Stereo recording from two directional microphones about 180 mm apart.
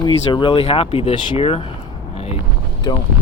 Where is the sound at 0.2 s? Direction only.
25° left (ahead or behind).